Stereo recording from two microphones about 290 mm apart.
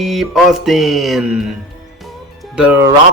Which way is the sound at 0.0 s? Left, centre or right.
Centre.